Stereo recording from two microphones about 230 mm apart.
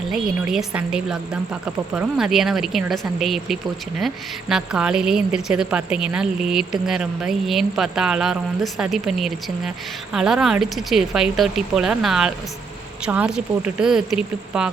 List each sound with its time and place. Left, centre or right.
0.1 s a woman's voice: centre